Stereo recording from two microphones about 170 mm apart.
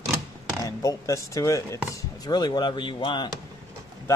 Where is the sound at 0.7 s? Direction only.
20° left (ahead or behind).